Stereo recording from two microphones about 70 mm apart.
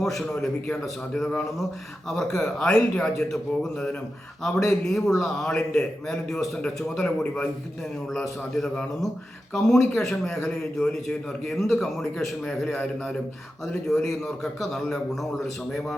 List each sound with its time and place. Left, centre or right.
0.0 s a man's voice: centre
8.5 s a man's voice: centre
13.8 s a man's voice: centre